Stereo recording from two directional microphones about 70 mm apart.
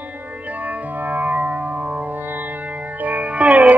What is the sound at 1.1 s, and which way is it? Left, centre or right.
Music, right.